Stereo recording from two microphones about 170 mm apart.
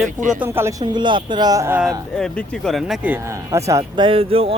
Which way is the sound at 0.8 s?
25° right (ahead or behind).